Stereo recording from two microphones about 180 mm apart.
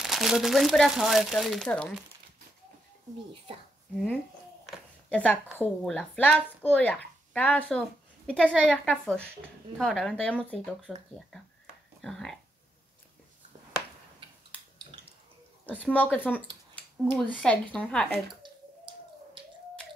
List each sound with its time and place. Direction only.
0.0 s speech: centre (ahead or behind)
3.9 s speech: 5° left (ahead or behind)
15.6 s speech: 10° left (ahead or behind)
18.4 s a sound: 25° right (ahead or behind)